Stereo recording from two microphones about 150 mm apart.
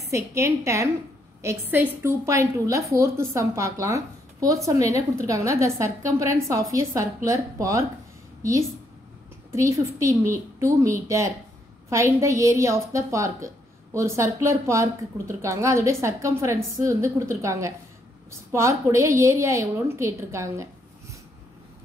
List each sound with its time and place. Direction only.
0.1 s a woman's voice: 20° right (ahead or behind)